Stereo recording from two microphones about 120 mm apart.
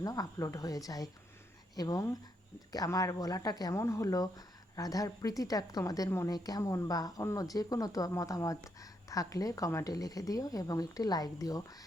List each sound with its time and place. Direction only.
0.0 s speech: 30° left (ahead or behind)